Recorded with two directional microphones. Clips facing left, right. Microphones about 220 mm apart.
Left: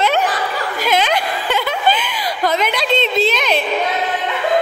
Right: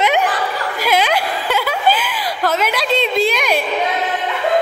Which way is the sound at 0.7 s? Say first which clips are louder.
Right 1 dB; 10° right (ahead or behind).